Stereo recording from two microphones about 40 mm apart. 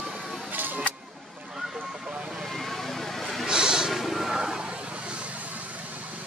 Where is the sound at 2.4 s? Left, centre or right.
Centre.